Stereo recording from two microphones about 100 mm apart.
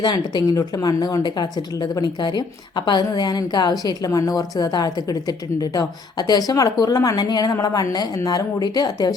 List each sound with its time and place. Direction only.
0.5 s speech: 35° left (ahead or behind)